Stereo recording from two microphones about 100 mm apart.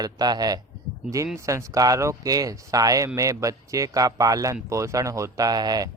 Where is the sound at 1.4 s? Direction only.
30° right (ahead or behind).